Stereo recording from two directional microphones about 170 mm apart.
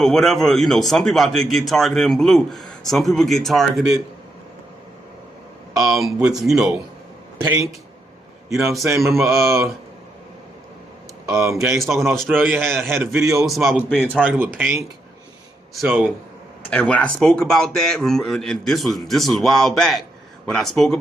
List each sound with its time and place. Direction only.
0.0 s a man's voice: centre (ahead or behind)
5.7 s a man's voice: centre (ahead or behind)
11.3 s speech: 15° right (ahead or behind)
11.6 s a man's voice: centre (ahead or behind)
14.3 s a man's voice: 10° right (ahead or behind)